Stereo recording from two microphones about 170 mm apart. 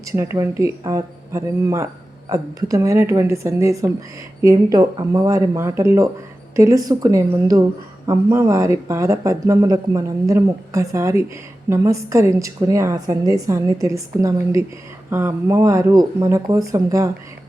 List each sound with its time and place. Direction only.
0.0 s a woman's voice: 15° right (ahead or behind)